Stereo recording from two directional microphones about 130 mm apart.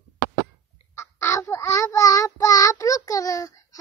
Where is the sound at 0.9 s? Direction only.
20° left (ahead or behind).